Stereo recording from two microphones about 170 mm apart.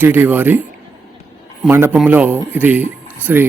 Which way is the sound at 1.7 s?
10° right (ahead or behind).